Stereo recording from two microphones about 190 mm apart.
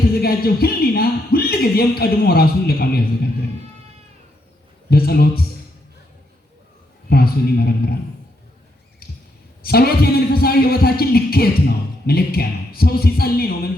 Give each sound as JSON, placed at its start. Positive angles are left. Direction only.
{"t": 0.2, "sound": "a man's voice", "side_deg": 55}
{"t": 4.9, "sound": "a man's voice", "side_deg": 55}
{"t": 7.1, "sound": "a man's voice", "side_deg": 55}
{"t": 9.6, "sound": "a man's voice", "side_deg": 55}